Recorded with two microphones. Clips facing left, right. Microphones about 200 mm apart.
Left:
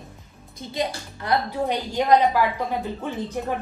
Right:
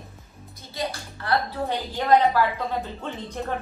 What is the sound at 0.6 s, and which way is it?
A woman's voice, 20° left (ahead or behind).